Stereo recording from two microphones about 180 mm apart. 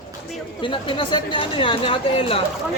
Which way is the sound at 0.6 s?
25° left (ahead or behind).